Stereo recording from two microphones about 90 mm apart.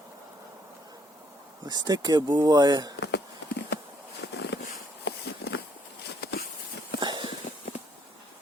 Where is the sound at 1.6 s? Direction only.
45° right (ahead or behind).